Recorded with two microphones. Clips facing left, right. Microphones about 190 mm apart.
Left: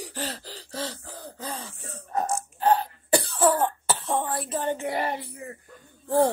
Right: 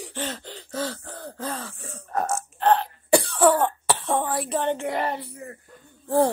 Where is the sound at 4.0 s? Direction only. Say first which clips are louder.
Right 2 dB; centre (ahead or behind).